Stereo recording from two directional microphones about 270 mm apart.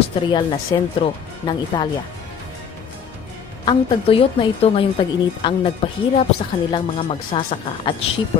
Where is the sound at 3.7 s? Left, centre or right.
Centre.